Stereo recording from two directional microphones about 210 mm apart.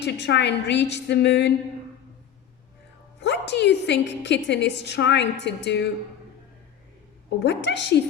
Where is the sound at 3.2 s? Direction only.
55° left (ahead or behind).